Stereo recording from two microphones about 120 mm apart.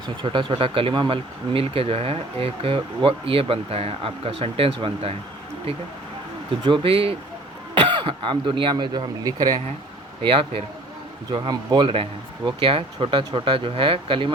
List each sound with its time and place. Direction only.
0.2 s speech: 45° right (ahead or behind)
6.7 s speech: 45° right (ahead or behind)
11.3 s speech: 35° right (ahead or behind)